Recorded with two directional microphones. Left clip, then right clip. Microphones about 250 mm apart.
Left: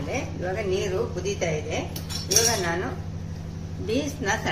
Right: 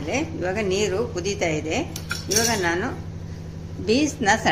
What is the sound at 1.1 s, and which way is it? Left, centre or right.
Speech, right.